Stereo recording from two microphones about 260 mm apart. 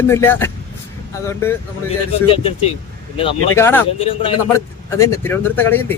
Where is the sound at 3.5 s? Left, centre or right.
Centre.